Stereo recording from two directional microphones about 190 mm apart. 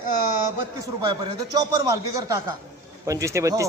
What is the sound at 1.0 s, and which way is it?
Speech, 20° right (ahead or behind).